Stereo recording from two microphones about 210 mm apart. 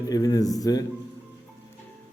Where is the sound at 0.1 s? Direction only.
15° left (ahead or behind).